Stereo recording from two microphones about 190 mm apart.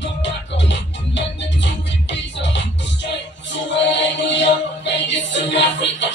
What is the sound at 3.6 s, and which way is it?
Music, 70° left (ahead or behind).